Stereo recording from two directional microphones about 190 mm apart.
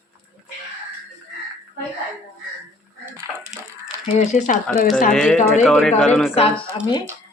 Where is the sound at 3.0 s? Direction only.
15° right (ahead or behind).